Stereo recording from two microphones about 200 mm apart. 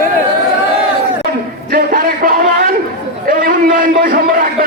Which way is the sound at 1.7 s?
45° right (ahead or behind).